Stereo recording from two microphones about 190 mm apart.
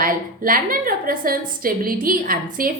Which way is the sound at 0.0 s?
50° right (ahead or behind).